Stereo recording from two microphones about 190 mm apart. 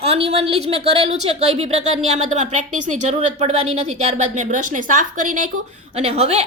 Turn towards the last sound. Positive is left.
turn(degrees=-35)  # may be behind; listen again after turning